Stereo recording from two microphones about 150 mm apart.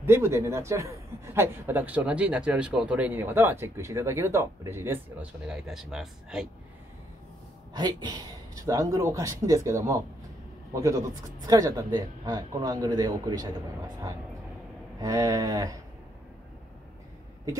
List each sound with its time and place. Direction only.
0.0 s a man's voice: 15° right (ahead or behind)
7.7 s speech: 30° right (ahead or behind)